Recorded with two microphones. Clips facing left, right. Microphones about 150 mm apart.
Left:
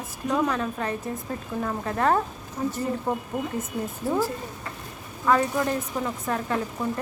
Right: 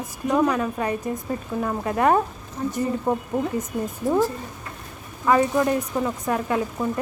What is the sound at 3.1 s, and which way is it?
A woman's voice, 10° right (ahead or behind).